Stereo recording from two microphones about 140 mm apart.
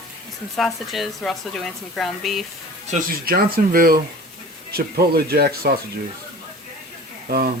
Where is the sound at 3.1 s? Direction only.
90° right.